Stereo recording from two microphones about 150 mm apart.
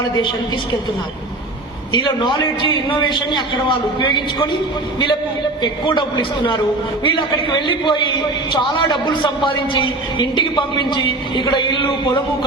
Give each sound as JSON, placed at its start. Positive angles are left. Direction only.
{"t": 0.0, "sound": "a man's voice", "side_deg": 30}
{"t": 1.9, "sound": "a man's voice", "side_deg": 30}
{"t": 5.6, "sound": "a man's voice", "side_deg": 30}